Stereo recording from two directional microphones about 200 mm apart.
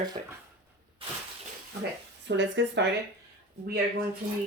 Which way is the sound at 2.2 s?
65° right (ahead or behind).